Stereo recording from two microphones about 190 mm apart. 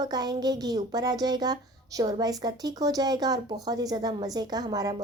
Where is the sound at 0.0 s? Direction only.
20° right (ahead or behind).